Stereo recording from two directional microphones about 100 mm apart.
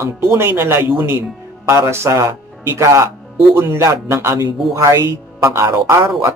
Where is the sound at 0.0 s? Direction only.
25° right (ahead or behind).